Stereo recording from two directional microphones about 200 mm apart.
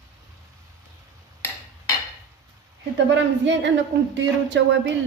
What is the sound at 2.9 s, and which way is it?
Speech, 65° right (ahead or behind).